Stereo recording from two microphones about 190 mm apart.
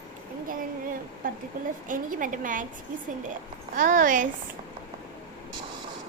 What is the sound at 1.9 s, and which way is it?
Speech, 45° right (ahead or behind).